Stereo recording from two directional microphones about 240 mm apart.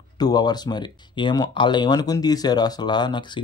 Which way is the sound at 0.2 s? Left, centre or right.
Centre.